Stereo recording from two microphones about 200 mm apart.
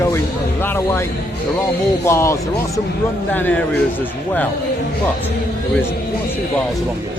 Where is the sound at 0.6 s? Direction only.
10° left (ahead or behind).